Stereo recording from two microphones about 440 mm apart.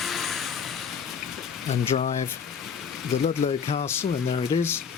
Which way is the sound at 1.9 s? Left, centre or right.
Centre.